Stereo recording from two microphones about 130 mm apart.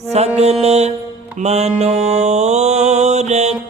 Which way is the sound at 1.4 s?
55° right (ahead or behind).